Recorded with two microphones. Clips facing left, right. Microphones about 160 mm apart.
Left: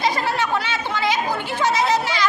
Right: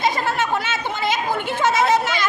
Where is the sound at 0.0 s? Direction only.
50° right (ahead or behind).